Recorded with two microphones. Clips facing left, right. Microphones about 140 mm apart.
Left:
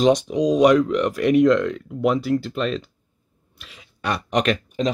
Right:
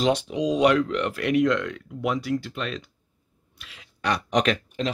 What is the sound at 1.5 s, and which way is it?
Speech, 45° left (ahead or behind).